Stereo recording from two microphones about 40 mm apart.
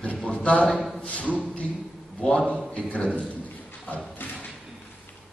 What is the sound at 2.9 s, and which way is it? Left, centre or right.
Speech, left.